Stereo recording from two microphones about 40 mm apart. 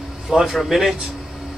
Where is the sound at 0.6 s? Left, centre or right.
Centre.